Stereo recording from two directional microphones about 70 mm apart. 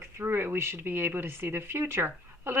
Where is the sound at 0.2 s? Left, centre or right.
Right.